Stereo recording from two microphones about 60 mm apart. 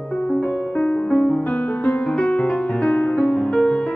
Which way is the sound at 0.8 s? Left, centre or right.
Left.